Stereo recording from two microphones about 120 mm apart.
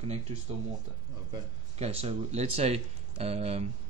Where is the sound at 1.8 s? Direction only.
60° right (ahead or behind).